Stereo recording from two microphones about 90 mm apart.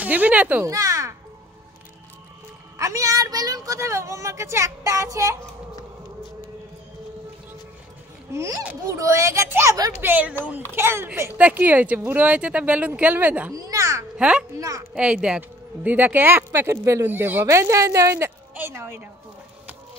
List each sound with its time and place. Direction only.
0.0 s speech: 15° right (ahead or behind)
0.7 s a sound: 40° right (ahead or behind)
2.8 s speech: 40° right (ahead or behind)
8.3 s speech: 30° right (ahead or behind)
13.5 s a child's voice: 40° right (ahead or behind)
14.1 s speech: 10° right (ahead or behind); by 17.1 s 35° right (ahead or behind)
17.1 s speech: 25° right (ahead or behind)